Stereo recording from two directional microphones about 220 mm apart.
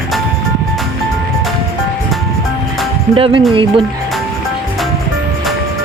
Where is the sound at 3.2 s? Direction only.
25° right (ahead or behind).